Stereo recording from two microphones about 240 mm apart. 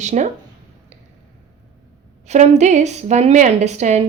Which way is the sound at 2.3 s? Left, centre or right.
Right.